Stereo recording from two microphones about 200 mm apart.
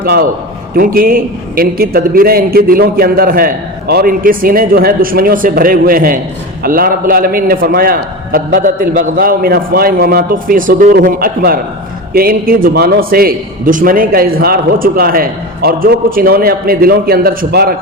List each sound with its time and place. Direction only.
0.0 s a man's voice: 50° right (ahead or behind)